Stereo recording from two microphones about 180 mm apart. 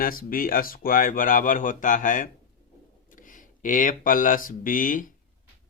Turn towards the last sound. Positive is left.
turn(degrees=50)  # may be behind; listen again after turning